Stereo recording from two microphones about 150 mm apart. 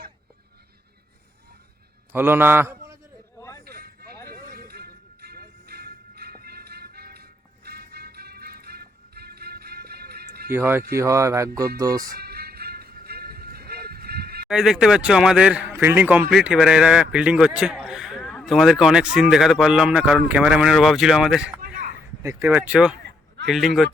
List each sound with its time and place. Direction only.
2.1 s a man's voice: 15° right (ahead or behind)
3.3 s a sound: 20° left (ahead or behind)
3.6 s a sound: 90° right
4.3 s music: 85° right
10.5 s speech: 15° right (ahead or behind)
12.1 s music: 90° right
14.4 s speech: centre (ahead or behind)
22.2 s speech: 20° right (ahead or behind); by 23.9 s centre (ahead or behind)